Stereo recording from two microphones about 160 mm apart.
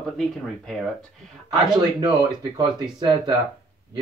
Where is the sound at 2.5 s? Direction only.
25° right (ahead or behind).